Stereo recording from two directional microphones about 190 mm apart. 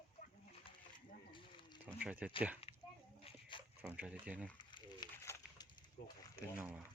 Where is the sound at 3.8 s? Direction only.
5° right (ahead or behind).